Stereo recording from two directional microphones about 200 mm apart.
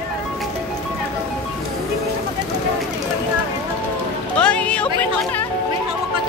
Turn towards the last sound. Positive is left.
turn(degrees=5)  # may be behind; listen again after turning